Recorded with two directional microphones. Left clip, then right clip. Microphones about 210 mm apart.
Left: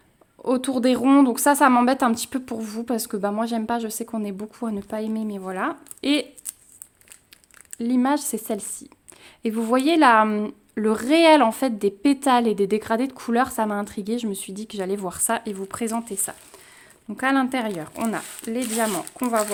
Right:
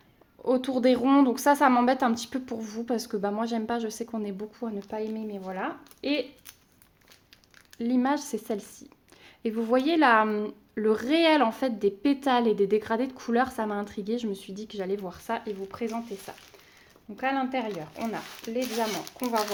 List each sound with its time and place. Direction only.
0.4 s a woman's voice: 25° left (ahead or behind)
4.9 s speech: 45° left (ahead or behind)
7.8 s a woman's voice: 20° left (ahead or behind); by 19.3 s 55° left (ahead or behind)